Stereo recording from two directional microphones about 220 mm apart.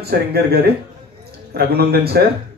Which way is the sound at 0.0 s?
45° right (ahead or behind).